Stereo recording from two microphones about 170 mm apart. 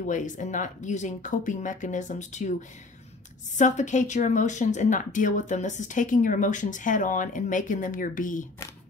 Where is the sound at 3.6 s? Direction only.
45° left (ahead or behind).